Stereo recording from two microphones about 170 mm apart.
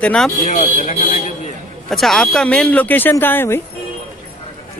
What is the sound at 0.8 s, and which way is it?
Speech, 45° left (ahead or behind).